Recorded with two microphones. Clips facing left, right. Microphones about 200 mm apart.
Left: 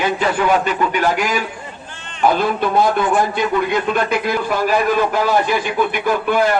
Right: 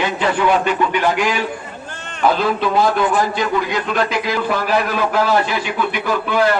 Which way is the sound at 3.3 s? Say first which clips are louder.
Left 2 dB; 55° left (ahead or behind).